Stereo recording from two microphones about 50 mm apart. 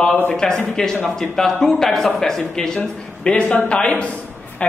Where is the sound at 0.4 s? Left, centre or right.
Centre.